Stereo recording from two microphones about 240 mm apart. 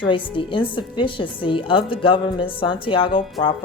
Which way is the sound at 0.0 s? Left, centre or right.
Left.